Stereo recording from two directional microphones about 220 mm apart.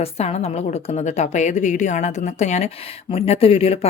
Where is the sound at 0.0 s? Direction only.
30° left (ahead or behind).